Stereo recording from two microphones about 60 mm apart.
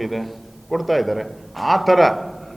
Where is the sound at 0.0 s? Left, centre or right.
Centre.